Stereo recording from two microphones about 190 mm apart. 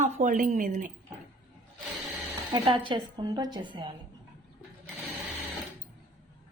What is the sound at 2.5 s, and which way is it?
A woman's voice, 25° right (ahead or behind).